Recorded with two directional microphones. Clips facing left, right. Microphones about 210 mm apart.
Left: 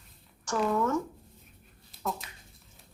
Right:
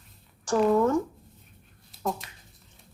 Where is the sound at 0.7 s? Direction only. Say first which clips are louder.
Right 4 dB; 35° right (ahead or behind).